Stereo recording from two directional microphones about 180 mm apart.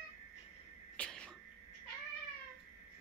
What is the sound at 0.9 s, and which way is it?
Throat clearing, 5° left (ahead or behind).